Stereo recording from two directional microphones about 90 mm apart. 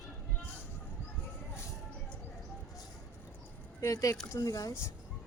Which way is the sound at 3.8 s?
40° left (ahead or behind).